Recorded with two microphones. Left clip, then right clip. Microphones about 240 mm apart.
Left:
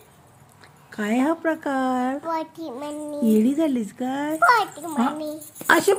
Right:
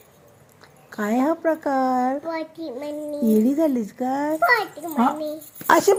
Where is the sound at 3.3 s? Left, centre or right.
Centre.